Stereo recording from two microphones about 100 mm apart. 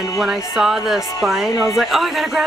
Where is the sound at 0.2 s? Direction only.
5° right (ahead or behind).